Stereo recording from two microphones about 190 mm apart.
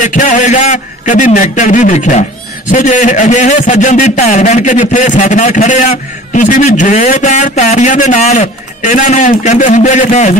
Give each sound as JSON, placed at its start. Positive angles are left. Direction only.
{"t": 0.0, "sound": "a man's voice", "side_deg": 40}